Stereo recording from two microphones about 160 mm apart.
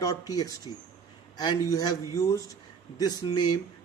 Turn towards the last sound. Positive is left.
turn(degrees=25)  # may be behind; listen again after turning